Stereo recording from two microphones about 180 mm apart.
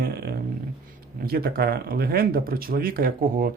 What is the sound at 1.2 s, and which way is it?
Speech, 55° right (ahead or behind).